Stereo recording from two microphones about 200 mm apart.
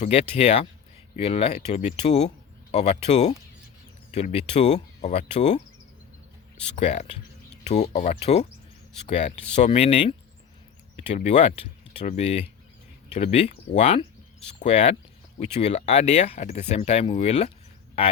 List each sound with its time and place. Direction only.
0.0 s speech: 30° left (ahead or behind)
6.7 s speech: 35° left (ahead or behind)